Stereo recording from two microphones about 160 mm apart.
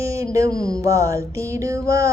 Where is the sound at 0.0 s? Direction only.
20° right (ahead or behind).